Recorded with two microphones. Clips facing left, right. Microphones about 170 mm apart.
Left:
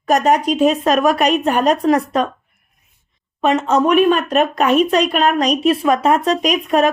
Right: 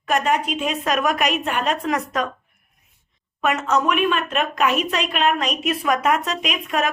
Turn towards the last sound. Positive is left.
turn(degrees=35)  # may be behind; listen again after turning